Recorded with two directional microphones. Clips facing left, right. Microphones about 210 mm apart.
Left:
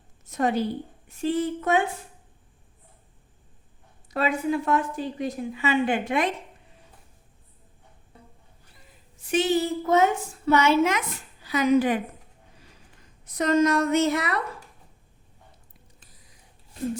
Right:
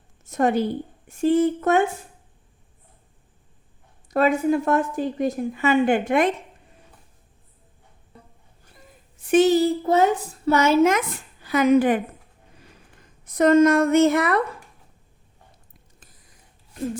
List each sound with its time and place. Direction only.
0.3 s a woman's voice: 50° right (ahead or behind)
4.1 s a woman's voice: 45° right (ahead or behind)
8.6 s a woman's voice: 50° right (ahead or behind)
13.2 s a woman's voice: 50° right (ahead or behind)